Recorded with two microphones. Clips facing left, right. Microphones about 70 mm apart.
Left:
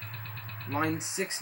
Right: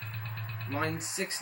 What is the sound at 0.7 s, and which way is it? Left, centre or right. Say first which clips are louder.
Speech: left 3 dB; centre.